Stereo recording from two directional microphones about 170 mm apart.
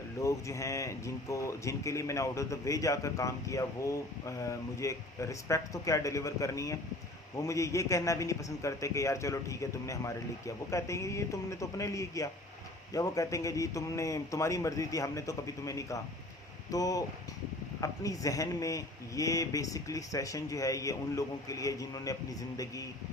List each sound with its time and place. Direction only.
0.2 s a man's voice: 20° left (ahead or behind)